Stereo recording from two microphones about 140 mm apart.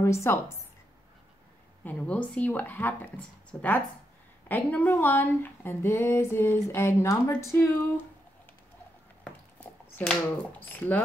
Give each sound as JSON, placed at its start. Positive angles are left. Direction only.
{"t": 0.0, "sound": "speech", "side_deg": 20}
{"t": 1.9, "sound": "speech", "side_deg": 10}
{"t": 9.2, "sound": "a sound", "side_deg": 10}
{"t": 10.6, "sound": "speech", "side_deg": 10}